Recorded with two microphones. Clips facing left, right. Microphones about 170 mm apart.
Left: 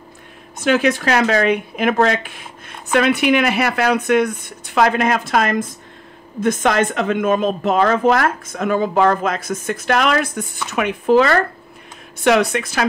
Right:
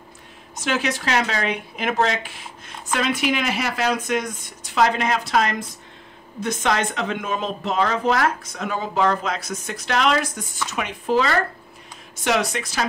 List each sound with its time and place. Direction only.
0.6 s a woman's voice: 55° left (ahead or behind)